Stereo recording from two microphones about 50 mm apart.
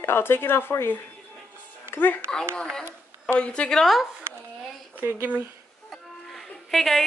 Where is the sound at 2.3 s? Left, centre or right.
Centre.